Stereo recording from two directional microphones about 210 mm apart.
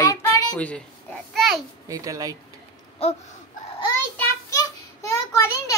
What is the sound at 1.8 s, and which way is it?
Speech, 15° right (ahead or behind).